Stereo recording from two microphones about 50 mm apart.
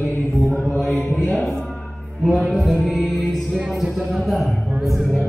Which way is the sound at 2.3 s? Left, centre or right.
Centre.